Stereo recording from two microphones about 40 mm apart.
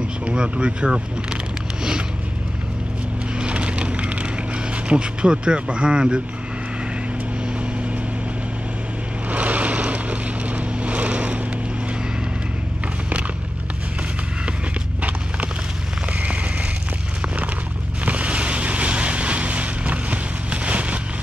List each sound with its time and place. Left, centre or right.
0.2 s speech: right
0.8 s vehicle: centre
3.3 s wood: right
4.8 s speech: right
9.3 s vehicle: right
16.2 s a sound: right
18.0 s vehicle: right